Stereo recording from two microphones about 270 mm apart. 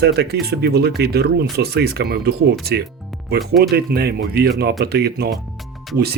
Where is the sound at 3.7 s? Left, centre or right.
Right.